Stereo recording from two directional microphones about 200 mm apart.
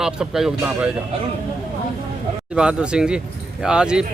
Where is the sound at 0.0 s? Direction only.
5° right (ahead or behind).